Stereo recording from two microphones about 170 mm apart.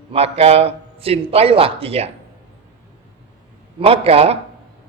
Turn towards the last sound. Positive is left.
turn(degrees=-35)  # may be behind; listen again after turning